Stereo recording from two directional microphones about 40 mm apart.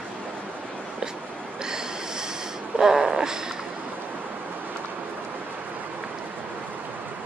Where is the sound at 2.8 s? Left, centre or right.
Centre.